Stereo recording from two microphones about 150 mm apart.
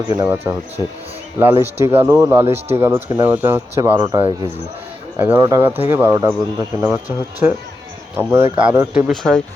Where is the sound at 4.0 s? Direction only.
30° right (ahead or behind).